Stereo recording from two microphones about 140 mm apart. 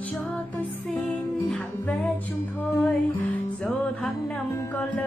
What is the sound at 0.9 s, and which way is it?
Music, centre (ahead or behind).